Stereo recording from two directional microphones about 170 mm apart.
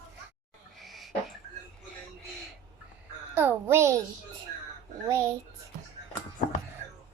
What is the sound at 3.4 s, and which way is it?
Speech, 10° right (ahead or behind).